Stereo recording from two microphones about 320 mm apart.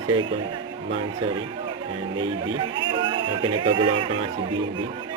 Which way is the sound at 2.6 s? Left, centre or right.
Centre.